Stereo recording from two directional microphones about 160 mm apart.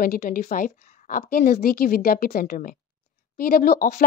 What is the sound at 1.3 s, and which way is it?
A woman's voice, 70° left (ahead or behind).